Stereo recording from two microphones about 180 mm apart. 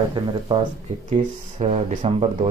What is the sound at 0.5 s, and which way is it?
Speech, 30° right (ahead or behind).